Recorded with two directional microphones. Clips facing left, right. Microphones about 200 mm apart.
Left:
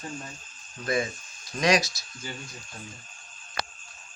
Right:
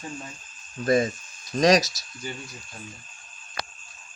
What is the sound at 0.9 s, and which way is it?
A man's voice, 40° right (ahead or behind).